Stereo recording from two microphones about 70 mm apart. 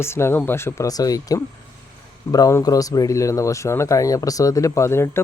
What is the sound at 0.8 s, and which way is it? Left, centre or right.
Speech, left.